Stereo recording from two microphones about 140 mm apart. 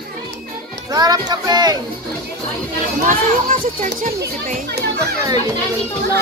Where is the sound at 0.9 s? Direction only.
25° right (ahead or behind).